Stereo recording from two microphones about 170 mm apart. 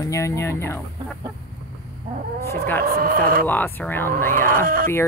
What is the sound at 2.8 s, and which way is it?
Speech, 60° right (ahead or behind).